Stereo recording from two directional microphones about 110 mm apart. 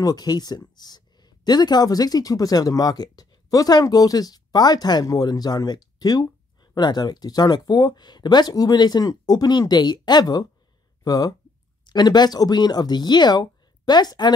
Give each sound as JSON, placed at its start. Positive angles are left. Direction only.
{"t": 0.0, "sound": "speech", "side_deg": 35}